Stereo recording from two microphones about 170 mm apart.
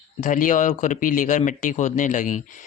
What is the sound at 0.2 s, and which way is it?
Speech, 50° left (ahead or behind).